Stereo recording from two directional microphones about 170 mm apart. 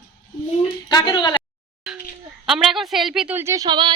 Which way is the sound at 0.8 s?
25° left (ahead or behind).